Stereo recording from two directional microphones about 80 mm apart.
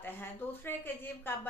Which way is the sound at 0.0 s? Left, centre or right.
Left.